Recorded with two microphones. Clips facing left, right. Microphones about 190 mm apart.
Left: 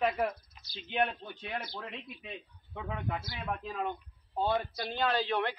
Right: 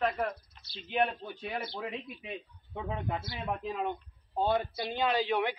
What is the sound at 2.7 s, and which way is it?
A man's voice, 25° right (ahead or behind).